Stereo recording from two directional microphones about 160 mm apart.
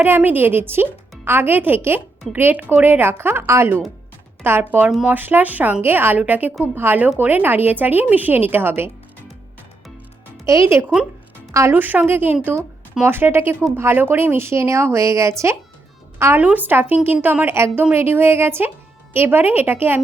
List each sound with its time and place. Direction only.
0.0 s a woman's voice: 10° right (ahead or behind)
10.4 s a woman's voice: 20° right (ahead or behind)